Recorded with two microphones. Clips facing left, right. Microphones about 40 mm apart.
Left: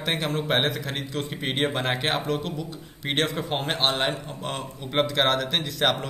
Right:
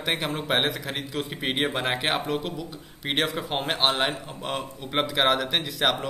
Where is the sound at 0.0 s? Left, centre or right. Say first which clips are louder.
Left 1 dB; centre.